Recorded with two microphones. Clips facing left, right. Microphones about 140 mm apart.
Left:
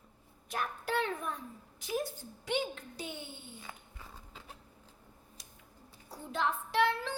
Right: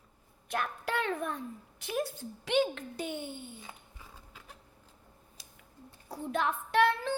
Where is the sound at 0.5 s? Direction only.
70° right (ahead or behind).